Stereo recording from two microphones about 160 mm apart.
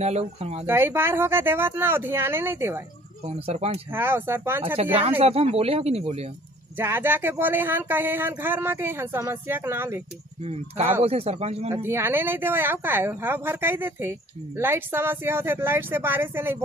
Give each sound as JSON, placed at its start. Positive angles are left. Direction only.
{"t": 0.0, "sound": "speech", "side_deg": -40}
{"t": 0.7, "sound": "speech", "side_deg": -15}
{"t": 3.3, "sound": "speech", "side_deg": -40}
{"t": 3.9, "sound": "speech", "side_deg": -15}
{"t": 5.2, "sound": "speech", "side_deg": -40}
{"t": 6.8, "sound": "speech", "side_deg": -15}
{"t": 10.4, "sound": "speech", "side_deg": -40}
{"t": 11.7, "sound": "speech", "side_deg": -15}